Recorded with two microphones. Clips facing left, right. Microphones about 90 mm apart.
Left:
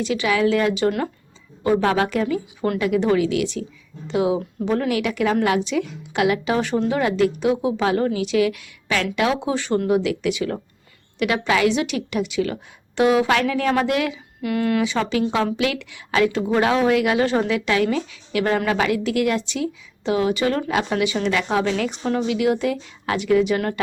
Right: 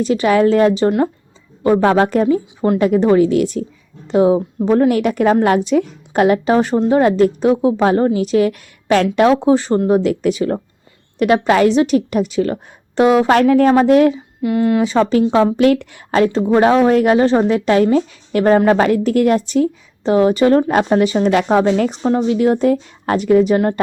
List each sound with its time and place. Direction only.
0.0 s a woman's voice: 40° right (ahead or behind)
14.4 s a woman's voice: 25° right (ahead or behind)
14.8 s a woman's voice: 35° right (ahead or behind)
15.5 s a woman's voice: 45° right (ahead or behind)